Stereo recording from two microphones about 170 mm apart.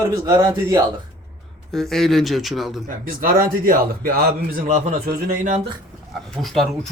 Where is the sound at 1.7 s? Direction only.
Centre (ahead or behind).